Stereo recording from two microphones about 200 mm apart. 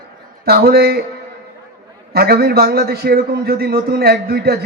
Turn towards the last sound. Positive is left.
turn(degrees=-50)  # may be behind; listen again after turning